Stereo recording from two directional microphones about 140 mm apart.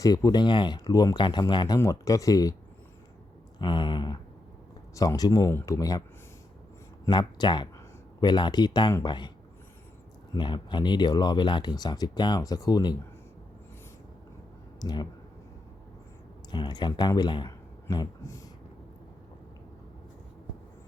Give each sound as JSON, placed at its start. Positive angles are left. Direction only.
{"t": 0.0, "sound": "speech", "side_deg": 25}
{"t": 3.6, "sound": "speech", "side_deg": 35}
{"t": 7.0, "sound": "speech", "side_deg": 30}
{"t": 10.3, "sound": "speech", "side_deg": 35}
{"t": 14.8, "sound": "speech", "side_deg": 30}
{"t": 16.5, "sound": "speech", "side_deg": 30}